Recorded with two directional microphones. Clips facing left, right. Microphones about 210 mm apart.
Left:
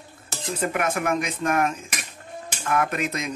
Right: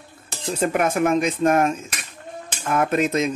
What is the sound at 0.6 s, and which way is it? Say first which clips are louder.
Speech: right 6 dB; 25° right (ahead or behind).